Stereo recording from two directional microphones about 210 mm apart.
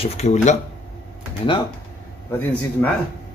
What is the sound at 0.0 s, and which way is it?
Speech, 30° left (ahead or behind).